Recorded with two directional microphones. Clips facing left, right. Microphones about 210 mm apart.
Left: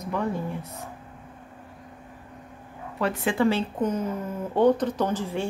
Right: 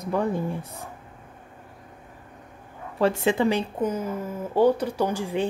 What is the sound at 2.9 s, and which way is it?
Speech, 25° right (ahead or behind).